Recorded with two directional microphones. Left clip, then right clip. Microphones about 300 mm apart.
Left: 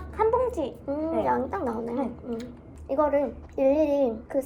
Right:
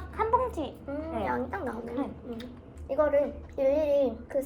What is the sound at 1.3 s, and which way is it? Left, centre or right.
Speech, left.